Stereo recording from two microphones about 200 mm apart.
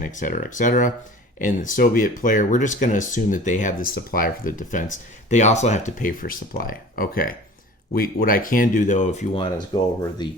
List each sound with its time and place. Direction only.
0.0 s speech: 40° left (ahead or behind); by 10.2 s 25° left (ahead or behind)